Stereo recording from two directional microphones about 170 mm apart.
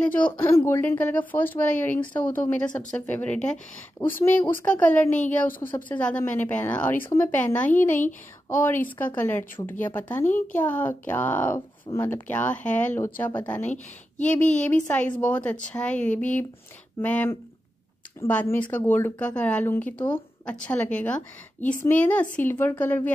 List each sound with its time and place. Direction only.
0.0 s speech: 10° left (ahead or behind)